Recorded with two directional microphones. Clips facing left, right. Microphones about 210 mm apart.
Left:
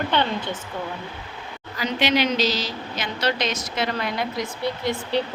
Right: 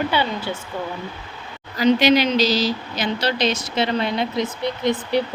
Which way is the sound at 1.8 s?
40° right (ahead or behind).